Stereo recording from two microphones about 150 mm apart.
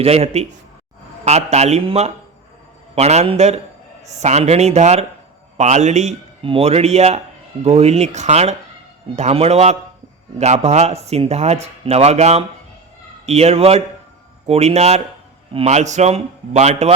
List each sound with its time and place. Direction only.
0.0 s speech: 45° right (ahead or behind)